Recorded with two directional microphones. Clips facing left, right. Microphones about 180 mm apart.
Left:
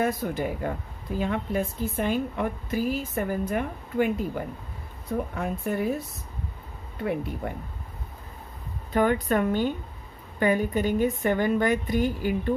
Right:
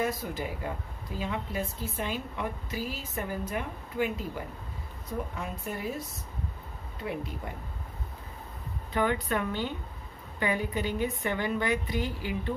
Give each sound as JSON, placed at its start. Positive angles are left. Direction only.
{"t": 0.0, "sound": "speech", "side_deg": 55}
{"t": 8.9, "sound": "speech", "side_deg": 45}